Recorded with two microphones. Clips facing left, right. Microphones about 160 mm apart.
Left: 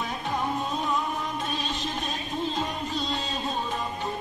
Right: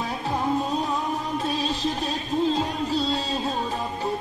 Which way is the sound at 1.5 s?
35° right (ahead or behind).